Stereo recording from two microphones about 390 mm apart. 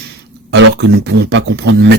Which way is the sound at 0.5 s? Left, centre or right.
Right.